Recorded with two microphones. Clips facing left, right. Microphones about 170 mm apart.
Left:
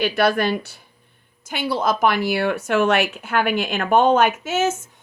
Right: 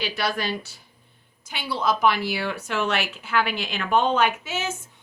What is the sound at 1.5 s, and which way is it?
Speech, 45° left (ahead or behind).